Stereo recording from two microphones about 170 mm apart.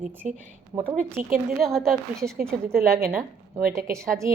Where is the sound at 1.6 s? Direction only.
Centre (ahead or behind).